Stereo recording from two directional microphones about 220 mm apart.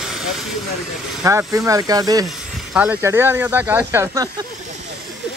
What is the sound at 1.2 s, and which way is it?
Speech, 15° right (ahead or behind).